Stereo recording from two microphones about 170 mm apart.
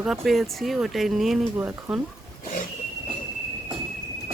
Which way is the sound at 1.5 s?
10° right (ahead or behind).